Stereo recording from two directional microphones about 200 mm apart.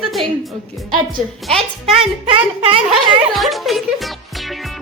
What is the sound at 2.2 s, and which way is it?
Speech, 25° right (ahead or behind).